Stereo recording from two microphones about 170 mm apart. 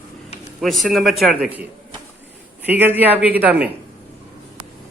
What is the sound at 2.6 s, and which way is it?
Speech, 10° right (ahead or behind).